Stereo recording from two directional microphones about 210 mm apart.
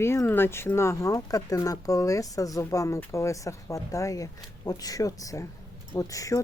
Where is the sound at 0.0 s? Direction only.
10° left (ahead or behind).